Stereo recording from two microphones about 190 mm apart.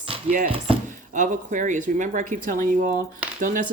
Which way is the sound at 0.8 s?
40° right (ahead or behind).